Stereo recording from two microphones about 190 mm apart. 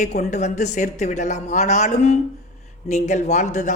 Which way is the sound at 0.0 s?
40° left (ahead or behind).